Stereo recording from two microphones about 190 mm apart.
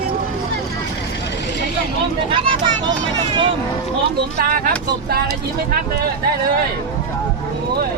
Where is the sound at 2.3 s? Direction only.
25° right (ahead or behind).